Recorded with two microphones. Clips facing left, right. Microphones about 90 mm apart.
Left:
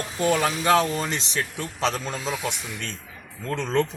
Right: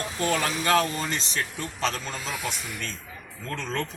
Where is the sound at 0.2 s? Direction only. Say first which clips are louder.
Left 4 dB; 10° left (ahead or behind).